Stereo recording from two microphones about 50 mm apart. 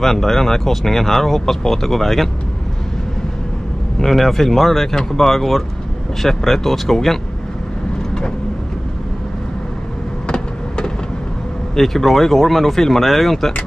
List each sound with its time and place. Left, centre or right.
0.0 s speech: centre
4.0 s speech: centre
10.2 s vehicle: centre
11.7 s speech: centre